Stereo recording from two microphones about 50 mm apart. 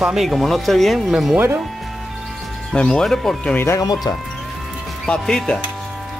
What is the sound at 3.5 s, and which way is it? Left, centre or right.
Speech, left.